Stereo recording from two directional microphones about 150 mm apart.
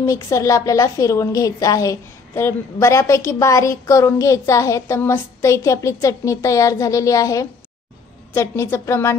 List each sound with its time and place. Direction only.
0.0 s a woman's voice: 20° left (ahead or behind)